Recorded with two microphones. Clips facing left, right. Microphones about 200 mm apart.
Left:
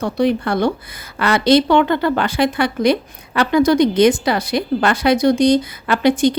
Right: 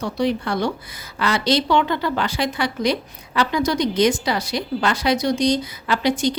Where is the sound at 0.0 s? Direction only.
55° left (ahead or behind).